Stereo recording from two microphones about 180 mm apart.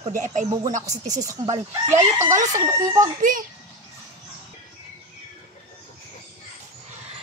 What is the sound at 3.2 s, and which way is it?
Speech, 50° right (ahead or behind).